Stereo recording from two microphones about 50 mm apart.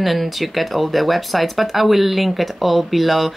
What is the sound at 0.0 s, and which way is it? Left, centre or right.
Speech, centre.